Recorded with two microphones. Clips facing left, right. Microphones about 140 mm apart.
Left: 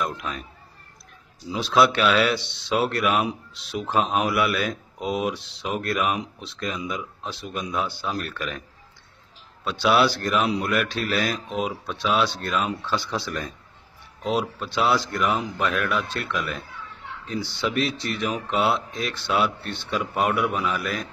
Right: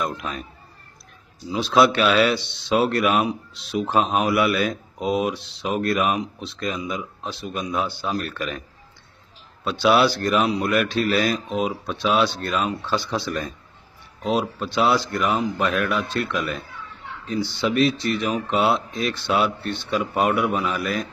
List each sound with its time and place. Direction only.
0.0 s speech: centre (ahead or behind)
1.5 s speech: centre (ahead or behind)
9.7 s speech: centre (ahead or behind)
12.8 s speech: 20° right (ahead or behind)
13.2 s speech: centre (ahead or behind)
18.0 s speech: 5° left (ahead or behind)